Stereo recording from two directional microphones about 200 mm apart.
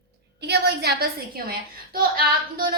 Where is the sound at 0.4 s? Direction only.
55° right (ahead or behind).